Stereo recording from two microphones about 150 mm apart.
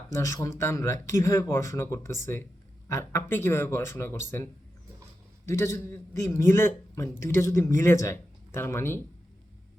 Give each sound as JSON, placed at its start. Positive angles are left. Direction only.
{"t": 0.1, "sound": "a man's voice", "side_deg": 20}
{"t": 5.5, "sound": "a man's voice", "side_deg": 15}